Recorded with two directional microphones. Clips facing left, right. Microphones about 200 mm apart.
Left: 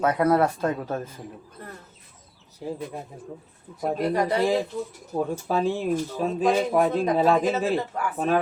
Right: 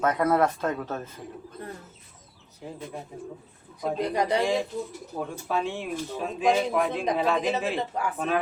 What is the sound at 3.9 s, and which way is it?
Speech, 20° right (ahead or behind).